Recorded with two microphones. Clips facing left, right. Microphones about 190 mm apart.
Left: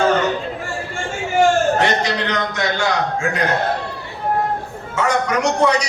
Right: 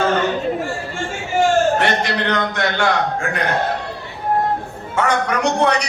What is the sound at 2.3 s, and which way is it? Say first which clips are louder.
Speech: right 1 dB; 60° right (ahead or behind).